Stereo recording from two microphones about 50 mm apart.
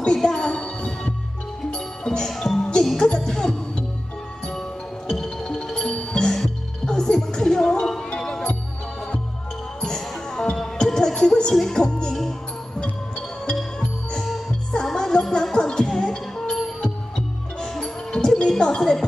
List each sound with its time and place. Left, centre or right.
0.0 s music: centre
2.6 s music: centre
9.8 s music: centre
14.7 s music: centre